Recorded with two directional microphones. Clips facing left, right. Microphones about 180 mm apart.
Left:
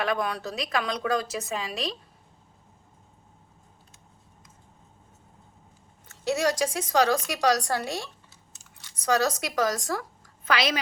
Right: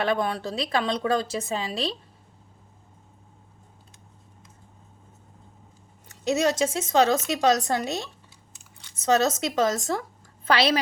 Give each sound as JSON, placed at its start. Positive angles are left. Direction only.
{"t": 0.0, "sound": "speech", "side_deg": -30}
{"t": 6.1, "sound": "a woman's voice", "side_deg": -20}